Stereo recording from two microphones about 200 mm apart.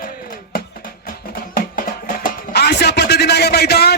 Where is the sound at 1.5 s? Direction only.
40° left (ahead or behind).